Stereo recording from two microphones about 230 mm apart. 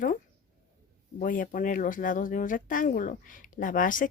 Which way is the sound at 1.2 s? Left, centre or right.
Left.